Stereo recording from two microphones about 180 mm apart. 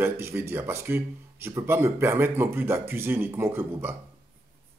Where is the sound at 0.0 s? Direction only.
15° right (ahead or behind).